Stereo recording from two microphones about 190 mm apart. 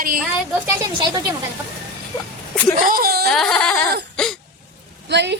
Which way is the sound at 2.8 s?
50° right (ahead or behind).